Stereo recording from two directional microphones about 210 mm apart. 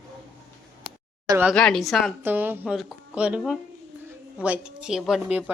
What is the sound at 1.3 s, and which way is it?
Speech, 10° right (ahead or behind).